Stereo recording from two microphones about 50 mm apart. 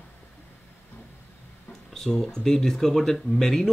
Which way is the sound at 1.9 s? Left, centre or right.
Centre.